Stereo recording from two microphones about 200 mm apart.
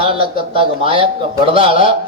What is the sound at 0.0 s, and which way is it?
A man's voice, 25° right (ahead or behind).